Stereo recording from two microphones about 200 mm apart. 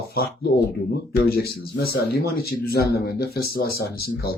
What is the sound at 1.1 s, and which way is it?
A man's voice, 50° left (ahead or behind).